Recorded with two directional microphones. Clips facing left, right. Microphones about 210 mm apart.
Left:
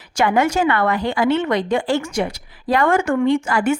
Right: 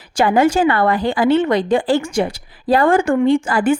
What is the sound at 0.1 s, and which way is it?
A woman's voice, 30° right (ahead or behind).